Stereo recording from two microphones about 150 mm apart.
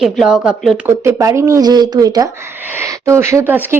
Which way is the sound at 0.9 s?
20° right (ahead or behind).